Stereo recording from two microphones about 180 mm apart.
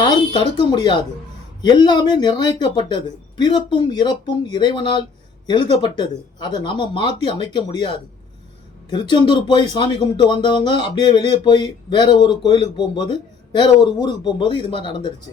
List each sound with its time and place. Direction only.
0.3 s speech: 25° left (ahead or behind)